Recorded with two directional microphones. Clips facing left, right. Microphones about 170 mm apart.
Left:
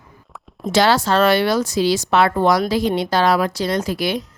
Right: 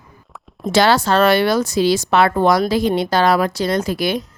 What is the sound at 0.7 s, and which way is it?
Speech, 55° right (ahead or behind).